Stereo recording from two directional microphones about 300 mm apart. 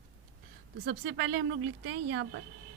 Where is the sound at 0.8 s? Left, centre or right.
Right.